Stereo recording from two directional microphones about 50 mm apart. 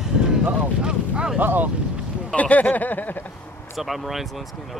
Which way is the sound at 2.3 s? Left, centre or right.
Left.